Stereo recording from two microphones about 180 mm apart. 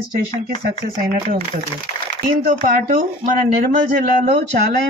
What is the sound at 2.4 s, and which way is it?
Speech, 45° right (ahead or behind).